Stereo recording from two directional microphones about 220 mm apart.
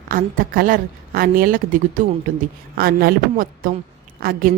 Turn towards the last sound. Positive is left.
turn(degrees=-40)  # may be behind; listen again after turning